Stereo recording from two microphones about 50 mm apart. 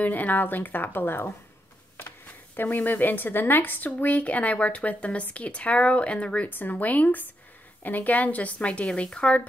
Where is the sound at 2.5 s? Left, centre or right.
Left.